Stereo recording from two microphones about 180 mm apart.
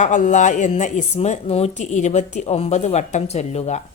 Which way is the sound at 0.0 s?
45° left (ahead or behind).